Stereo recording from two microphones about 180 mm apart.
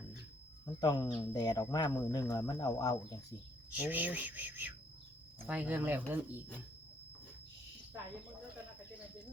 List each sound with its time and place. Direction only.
0.6 s speech: 20° left (ahead or behind)
3.7 s speech: 10° right (ahead or behind)